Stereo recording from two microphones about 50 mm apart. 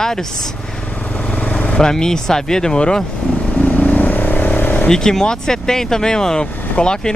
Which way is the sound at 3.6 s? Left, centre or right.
Left.